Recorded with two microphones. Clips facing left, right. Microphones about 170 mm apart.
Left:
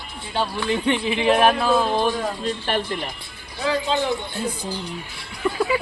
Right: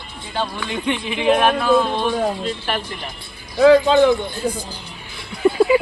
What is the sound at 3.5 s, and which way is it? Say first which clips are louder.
Speech: right 11 dB; 70° right (ahead or behind).